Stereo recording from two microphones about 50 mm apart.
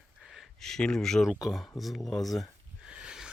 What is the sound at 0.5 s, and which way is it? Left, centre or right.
Speech, centre.